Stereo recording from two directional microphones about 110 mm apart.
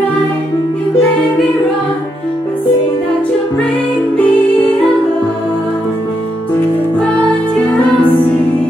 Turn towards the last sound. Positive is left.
turn(degrees=10)  # may be behind; listen again after turning